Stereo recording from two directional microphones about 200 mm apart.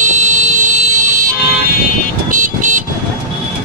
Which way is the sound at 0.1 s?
35° right (ahead or behind).